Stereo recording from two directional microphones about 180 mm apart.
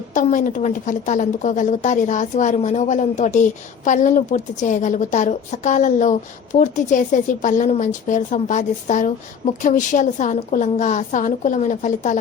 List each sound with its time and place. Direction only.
0.1 s a woman's voice: 45° left (ahead or behind)